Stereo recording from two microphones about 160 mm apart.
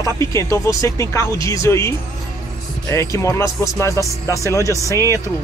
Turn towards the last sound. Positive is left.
turn(degrees=-20)  # may be behind; listen again after turning